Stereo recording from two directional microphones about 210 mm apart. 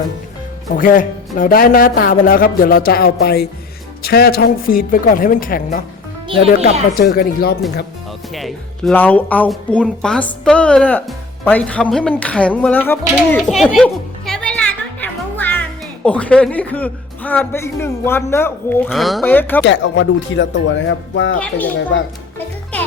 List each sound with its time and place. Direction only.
0.8 s speech: 40° left (ahead or behind)
6.9 s speech: 45° left (ahead or behind)
8.3 s speech: centre (ahead or behind)
15.0 s music: 10° left (ahead or behind)
16.0 s a man's voice: 5° left (ahead or behind)
19.6 s speech: 60° left (ahead or behind)
21.3 s speech: 5° left (ahead or behind)
21.9 s speech: 60° left (ahead or behind)